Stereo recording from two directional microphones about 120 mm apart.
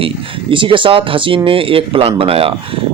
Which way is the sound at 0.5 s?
45° right (ahead or behind).